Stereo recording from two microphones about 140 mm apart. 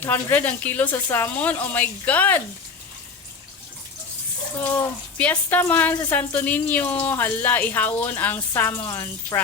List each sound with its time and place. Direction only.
0.0 s speech: 15° left (ahead or behind)
4.6 s speech: 10° left (ahead or behind)